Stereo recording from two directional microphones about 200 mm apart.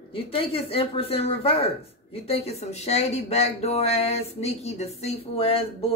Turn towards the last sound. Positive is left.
turn(degrees=30)  # may be behind; listen again after turning